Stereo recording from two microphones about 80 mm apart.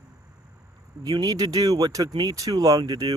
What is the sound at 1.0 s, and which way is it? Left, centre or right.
Speech, right.